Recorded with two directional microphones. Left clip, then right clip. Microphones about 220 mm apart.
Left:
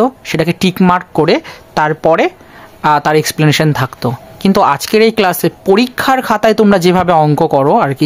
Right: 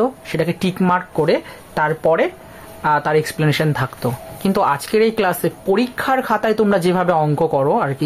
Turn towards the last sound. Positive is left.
turn(degrees=40)  # may be behind; listen again after turning